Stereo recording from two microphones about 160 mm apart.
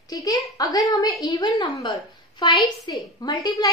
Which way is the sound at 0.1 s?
20° left (ahead or behind).